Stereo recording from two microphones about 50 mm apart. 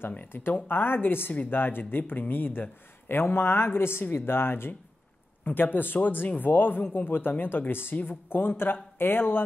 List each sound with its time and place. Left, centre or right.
0.3 s speech: left